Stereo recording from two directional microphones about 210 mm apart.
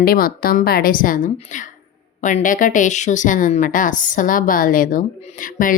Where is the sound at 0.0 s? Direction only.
45° left (ahead or behind).